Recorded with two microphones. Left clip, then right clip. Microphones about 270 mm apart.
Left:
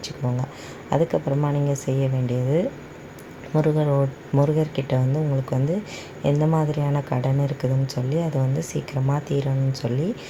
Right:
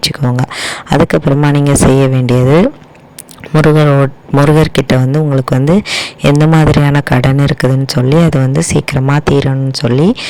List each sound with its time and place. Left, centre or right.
0.5 s speech: right